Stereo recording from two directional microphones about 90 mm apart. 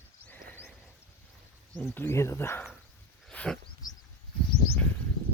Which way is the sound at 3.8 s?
45° left (ahead or behind).